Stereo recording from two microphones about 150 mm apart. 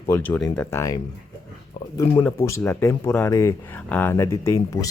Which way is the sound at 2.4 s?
15° left (ahead or behind).